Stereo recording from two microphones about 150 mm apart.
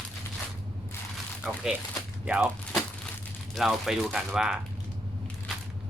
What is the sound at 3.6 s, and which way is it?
Speech, centre (ahead or behind).